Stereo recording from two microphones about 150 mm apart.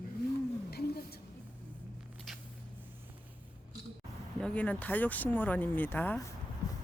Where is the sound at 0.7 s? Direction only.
90° left.